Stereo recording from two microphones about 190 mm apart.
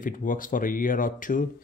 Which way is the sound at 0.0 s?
45° left (ahead or behind).